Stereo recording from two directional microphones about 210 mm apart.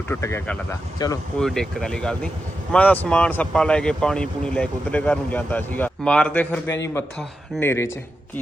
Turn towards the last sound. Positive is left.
turn(degrees=10)  # may be behind; listen again after turning